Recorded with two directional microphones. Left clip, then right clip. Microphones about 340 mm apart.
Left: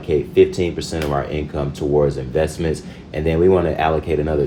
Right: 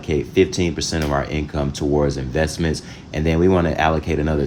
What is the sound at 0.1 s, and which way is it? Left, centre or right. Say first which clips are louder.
Speech: left 3 dB; right.